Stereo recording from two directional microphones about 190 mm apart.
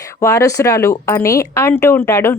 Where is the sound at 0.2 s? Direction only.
15° left (ahead or behind).